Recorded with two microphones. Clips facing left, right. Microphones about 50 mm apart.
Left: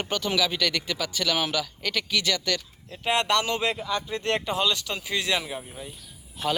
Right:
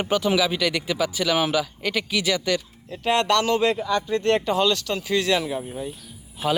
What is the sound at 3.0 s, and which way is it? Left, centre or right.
Speech, centre.